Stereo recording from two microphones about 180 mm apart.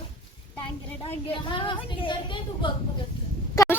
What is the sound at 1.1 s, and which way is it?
A woman's voice, 30° left (ahead or behind).